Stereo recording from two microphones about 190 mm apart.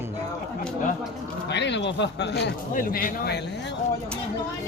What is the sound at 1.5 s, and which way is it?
Speech, 65° left (ahead or behind).